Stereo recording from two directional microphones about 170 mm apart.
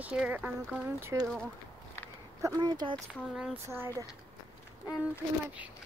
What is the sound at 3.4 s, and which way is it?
Speech, 10° right (ahead or behind).